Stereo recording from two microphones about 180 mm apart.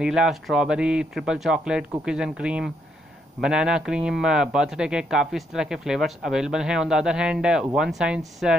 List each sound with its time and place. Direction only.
0.0 s speech: 5° right (ahead or behind)